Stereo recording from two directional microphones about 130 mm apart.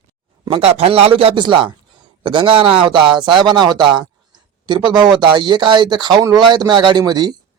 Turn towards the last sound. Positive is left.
turn(degrees=-30)  # may be behind; listen again after turning